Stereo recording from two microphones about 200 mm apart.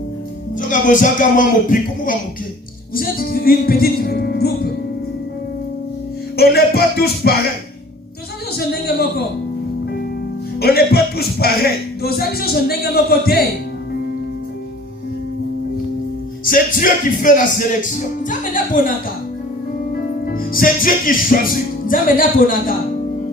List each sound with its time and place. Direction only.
0.7 s speech: 40° left (ahead or behind)
6.3 s speech: 50° left (ahead or behind)
8.5 s speech: 50° left (ahead or behind)
10.6 s speech: 50° left (ahead or behind)
16.5 s speech: 45° left (ahead or behind)
19.9 s music: 45° left (ahead or behind)